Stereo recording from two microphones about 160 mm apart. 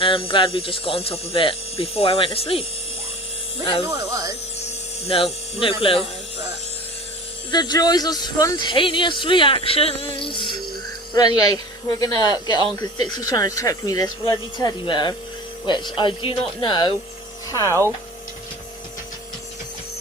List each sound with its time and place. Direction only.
0.0 s speech: 35° left (ahead or behind)
3.8 s speech: 20° right (ahead or behind)
4.6 s speech: 40° left (ahead or behind)
7.5 s speech: 25° left (ahead or behind)